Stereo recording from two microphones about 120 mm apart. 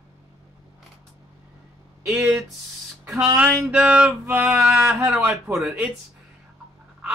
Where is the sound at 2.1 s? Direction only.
15° right (ahead or behind).